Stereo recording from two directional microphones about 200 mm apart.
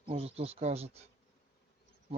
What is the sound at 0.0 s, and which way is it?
Speech, 30° right (ahead or behind).